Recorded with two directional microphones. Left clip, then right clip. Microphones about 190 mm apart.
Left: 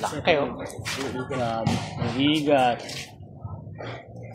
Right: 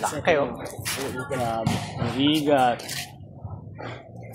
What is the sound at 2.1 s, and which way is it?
Speech, 5° right (ahead or behind).